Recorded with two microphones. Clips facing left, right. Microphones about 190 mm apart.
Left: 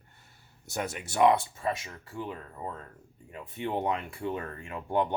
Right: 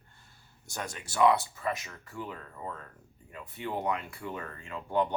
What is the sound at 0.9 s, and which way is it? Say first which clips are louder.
Speech: left 1 dB; 20° left (ahead or behind).